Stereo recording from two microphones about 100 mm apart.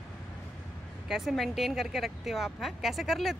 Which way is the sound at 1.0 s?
5° right (ahead or behind).